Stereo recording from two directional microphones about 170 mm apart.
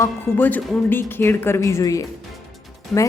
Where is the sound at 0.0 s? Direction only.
10° left (ahead or behind).